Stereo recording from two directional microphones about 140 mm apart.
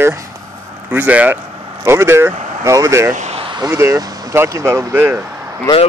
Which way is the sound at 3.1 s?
50° right (ahead or behind).